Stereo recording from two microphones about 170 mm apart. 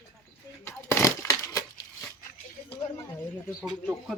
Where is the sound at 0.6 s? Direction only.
15° left (ahead or behind).